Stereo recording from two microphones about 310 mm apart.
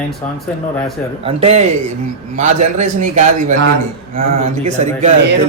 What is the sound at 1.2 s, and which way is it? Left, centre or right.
A man's voice, centre.